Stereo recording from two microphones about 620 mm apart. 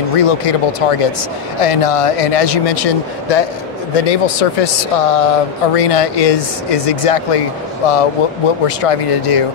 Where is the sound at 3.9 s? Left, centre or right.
Left.